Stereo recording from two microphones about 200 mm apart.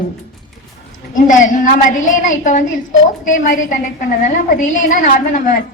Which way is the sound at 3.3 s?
40° left (ahead or behind).